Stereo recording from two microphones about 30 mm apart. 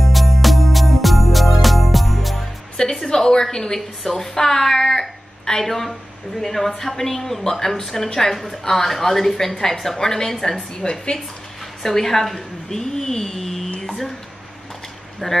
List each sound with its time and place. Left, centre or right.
0.0 s music: centre
3.1 s a sound: centre
4.2 s a woman's voice: centre
10.8 s a woman's voice: left
11.8 s a woman's voice: centre
13.7 s a sound: centre
15.2 s a woman's voice: centre